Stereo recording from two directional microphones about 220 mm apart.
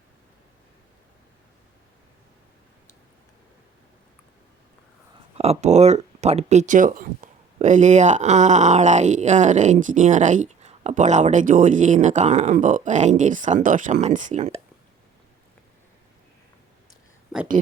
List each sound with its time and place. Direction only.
5.4 s speech: 30° right (ahead or behind)